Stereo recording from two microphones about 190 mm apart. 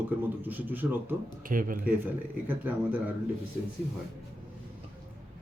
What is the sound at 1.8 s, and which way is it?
Speech, 10° right (ahead or behind).